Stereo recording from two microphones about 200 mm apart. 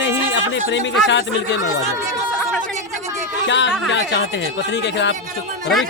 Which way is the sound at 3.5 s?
60° left (ahead or behind).